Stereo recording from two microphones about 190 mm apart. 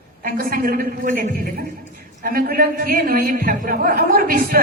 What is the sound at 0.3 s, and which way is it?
A woman's voice, 50° right (ahead or behind).